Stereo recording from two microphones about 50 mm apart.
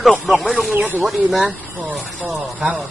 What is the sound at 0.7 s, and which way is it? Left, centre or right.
Speech, right.